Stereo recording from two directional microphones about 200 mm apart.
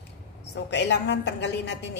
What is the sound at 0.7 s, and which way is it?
A woman's voice, 60° left (ahead or behind).